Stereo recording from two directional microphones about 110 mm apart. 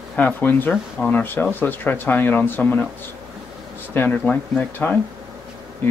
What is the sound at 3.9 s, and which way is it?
Speech, 20° left (ahead or behind).